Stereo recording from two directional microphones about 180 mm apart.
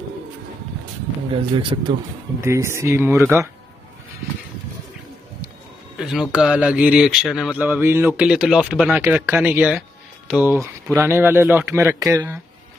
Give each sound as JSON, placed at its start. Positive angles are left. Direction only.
{"t": 1.3, "sound": "speech", "side_deg": -30}
{"t": 2.4, "sound": "speech", "side_deg": -15}
{"t": 5.9, "sound": "speech", "side_deg": -5}
{"t": 7.6, "sound": "speech", "side_deg": -10}